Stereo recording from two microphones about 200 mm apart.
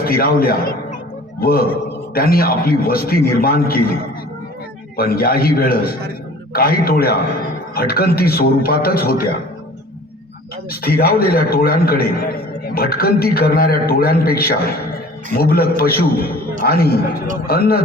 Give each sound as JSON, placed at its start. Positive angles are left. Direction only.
{"t": 0.0, "sound": "a man's voice", "side_deg": 50}
{"t": 4.9, "sound": "a man's voice", "side_deg": 50}
{"t": 10.7, "sound": "a man's voice", "side_deg": 50}